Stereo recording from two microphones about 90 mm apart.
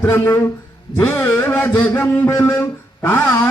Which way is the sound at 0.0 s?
25° left (ahead or behind).